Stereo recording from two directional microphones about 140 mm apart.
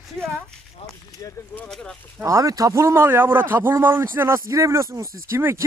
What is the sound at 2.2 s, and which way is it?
Speech, 25° right (ahead or behind).